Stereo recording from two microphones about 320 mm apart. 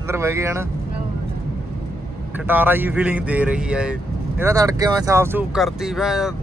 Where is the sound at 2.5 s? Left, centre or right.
Centre.